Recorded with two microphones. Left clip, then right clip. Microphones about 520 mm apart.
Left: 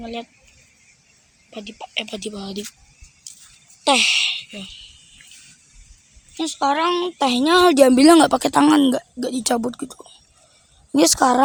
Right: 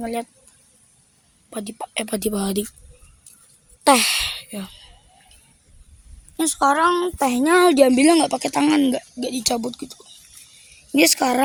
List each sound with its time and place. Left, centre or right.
0.0 s speech: right
1.5 s speech: right
3.8 s speech: right
6.3 s a woman's voice: right